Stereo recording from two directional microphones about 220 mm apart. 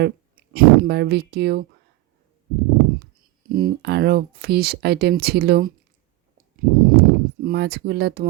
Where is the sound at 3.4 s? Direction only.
40° right (ahead or behind).